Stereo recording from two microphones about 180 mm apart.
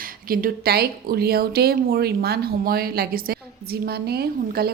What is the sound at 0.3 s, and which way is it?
A woman's voice, 55° right (ahead or behind).